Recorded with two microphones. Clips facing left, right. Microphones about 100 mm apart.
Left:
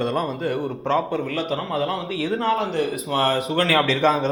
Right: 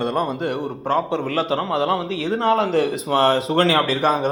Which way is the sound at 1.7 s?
80° right.